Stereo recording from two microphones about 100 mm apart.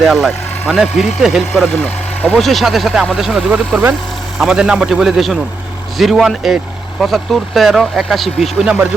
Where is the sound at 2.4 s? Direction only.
Centre (ahead or behind).